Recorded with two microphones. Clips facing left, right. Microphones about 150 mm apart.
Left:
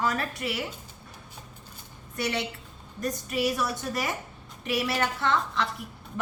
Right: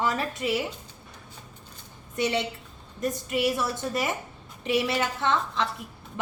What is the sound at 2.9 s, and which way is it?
A woman's voice, 25° right (ahead or behind).